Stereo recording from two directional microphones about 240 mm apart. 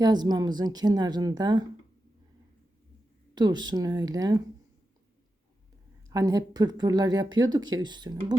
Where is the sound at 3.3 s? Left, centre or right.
Centre.